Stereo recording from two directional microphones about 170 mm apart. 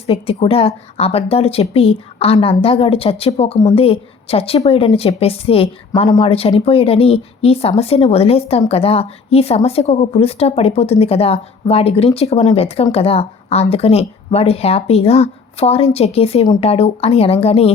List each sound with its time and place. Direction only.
0.1 s speech: 35° left (ahead or behind)